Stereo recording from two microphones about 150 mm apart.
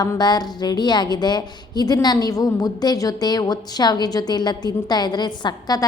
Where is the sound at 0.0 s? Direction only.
25° left (ahead or behind).